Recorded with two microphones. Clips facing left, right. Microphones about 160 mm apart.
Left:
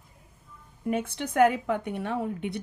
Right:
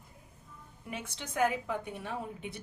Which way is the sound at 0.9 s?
55° left (ahead or behind).